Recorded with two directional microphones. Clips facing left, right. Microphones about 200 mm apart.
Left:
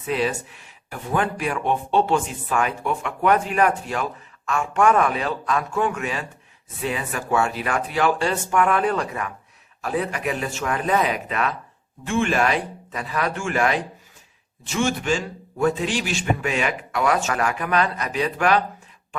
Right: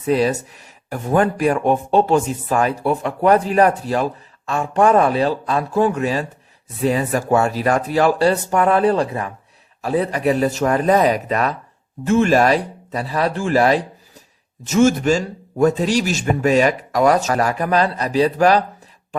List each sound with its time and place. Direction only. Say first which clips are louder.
0.0 s speech: right 6 dB; 40° right (ahead or behind)